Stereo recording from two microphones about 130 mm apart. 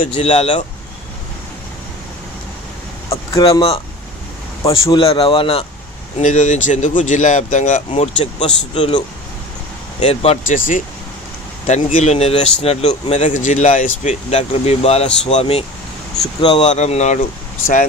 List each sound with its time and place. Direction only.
0.1 s speech: 50° left (ahead or behind)
3.5 s speech: 45° left (ahead or behind)
4.8 s speech: 40° left (ahead or behind)
6.1 s speech: 65° left (ahead or behind)
10.4 s speech: 90° left
11.6 s speech: 60° left (ahead or behind)
13.3 s speech: 70° left (ahead or behind); by 16.7 s 40° left (ahead or behind)
16.7 s speech: 60° left (ahead or behind)